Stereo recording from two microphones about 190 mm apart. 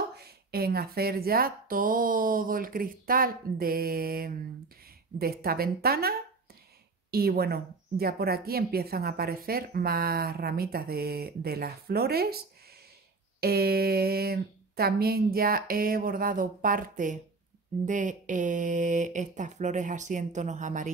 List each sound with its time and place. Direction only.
0.1 s speech: 55° right (ahead or behind)